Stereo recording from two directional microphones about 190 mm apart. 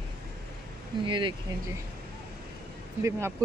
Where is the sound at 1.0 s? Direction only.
25° right (ahead or behind).